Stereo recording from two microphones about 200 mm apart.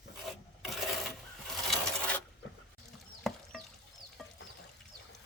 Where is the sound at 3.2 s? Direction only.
Centre (ahead or behind).